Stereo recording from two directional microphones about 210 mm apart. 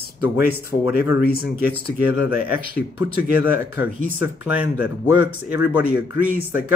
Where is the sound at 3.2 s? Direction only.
10° right (ahead or behind).